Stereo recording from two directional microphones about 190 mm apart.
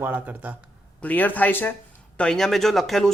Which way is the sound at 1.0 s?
10° left (ahead or behind).